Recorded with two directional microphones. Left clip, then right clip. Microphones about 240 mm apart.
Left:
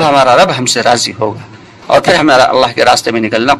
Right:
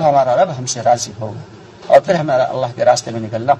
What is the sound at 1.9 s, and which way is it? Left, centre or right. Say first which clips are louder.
Speech: left 4 dB; left.